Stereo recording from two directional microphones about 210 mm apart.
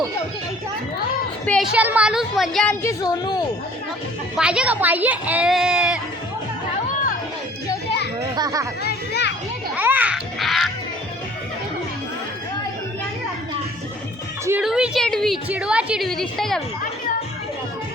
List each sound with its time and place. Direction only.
1.7 s a woman's voice: 5° right (ahead or behind)
2.8 s speech: 20° left (ahead or behind)
4.4 s a woman's voice: 5° right (ahead or behind)
8.4 s speech: 15° right (ahead or behind)
8.8 s children playing: 50° left (ahead or behind)
9.7 s babbling: 10° right (ahead or behind)
14.4 s a woman's voice: 5° right (ahead or behind)